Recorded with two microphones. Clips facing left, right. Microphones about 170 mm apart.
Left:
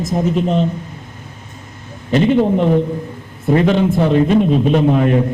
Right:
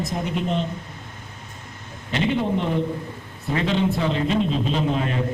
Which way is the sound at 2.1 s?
45° left (ahead or behind).